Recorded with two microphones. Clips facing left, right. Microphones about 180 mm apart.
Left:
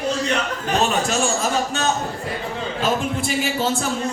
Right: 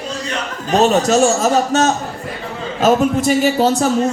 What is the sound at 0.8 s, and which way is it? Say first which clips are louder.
A man's voice: right 10 dB; 40° right (ahead or behind).